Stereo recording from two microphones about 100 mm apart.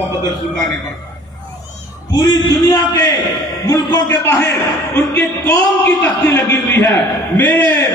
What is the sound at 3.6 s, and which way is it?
A man's voice, 25° left (ahead or behind).